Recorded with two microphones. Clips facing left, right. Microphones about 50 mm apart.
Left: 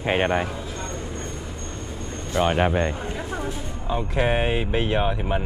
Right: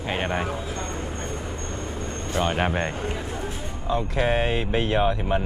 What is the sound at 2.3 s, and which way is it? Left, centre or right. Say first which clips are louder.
Speech: left 3 dB; centre.